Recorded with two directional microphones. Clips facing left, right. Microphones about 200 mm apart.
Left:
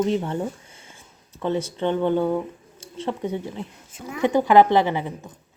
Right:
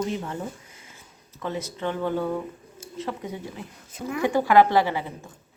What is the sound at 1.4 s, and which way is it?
Speech, 30° left (ahead or behind).